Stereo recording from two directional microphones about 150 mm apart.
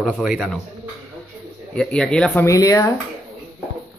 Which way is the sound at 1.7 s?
5° left (ahead or behind).